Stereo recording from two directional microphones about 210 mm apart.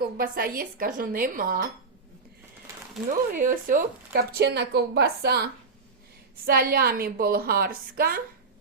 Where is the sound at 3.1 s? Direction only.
40° right (ahead or behind).